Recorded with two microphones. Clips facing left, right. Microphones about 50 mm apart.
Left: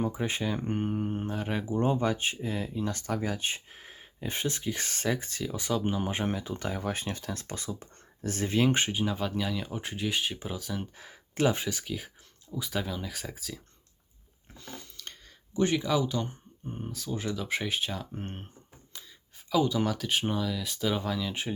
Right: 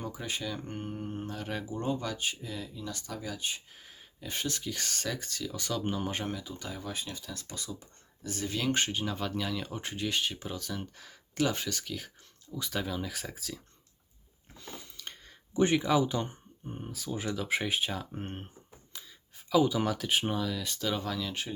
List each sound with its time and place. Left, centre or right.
0.0 s speech: left
6.2 s speech: left
8.9 s speech: centre
10.9 s speech: left; by 13.6 s centre
14.6 s biting: centre
15.5 s speech: centre
16.6 s speech: centre
18.9 s a sound: centre
19.5 s speech: centre